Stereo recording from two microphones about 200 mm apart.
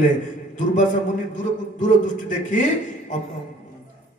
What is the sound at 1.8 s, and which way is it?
Speech, 40° left (ahead or behind).